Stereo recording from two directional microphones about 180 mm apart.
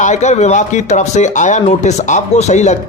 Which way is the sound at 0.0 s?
40° left (ahead or behind).